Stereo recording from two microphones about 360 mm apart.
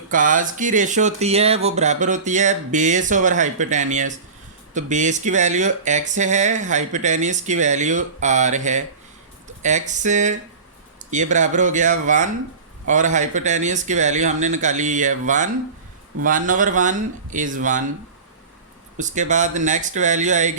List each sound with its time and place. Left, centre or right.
0.1 s speech: right
18.9 s speech: centre